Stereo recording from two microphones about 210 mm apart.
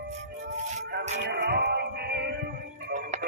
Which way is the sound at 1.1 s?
55° right (ahead or behind).